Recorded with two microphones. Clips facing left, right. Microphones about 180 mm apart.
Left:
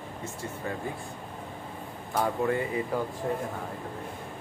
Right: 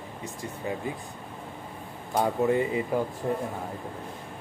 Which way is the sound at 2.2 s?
20° right (ahead or behind).